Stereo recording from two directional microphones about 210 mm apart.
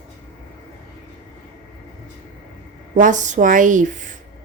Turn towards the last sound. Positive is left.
turn(degrees=-35)  # may be behind; listen again after turning